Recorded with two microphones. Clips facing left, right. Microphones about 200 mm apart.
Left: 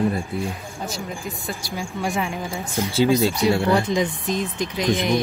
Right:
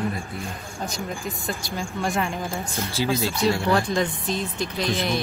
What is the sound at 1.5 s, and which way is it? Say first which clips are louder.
Speech: even; 10° left (ahead or behind).